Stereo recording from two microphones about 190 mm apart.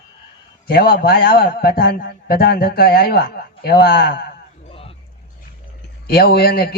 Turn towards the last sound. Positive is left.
turn(degrees=55)  # may be behind; listen again after turning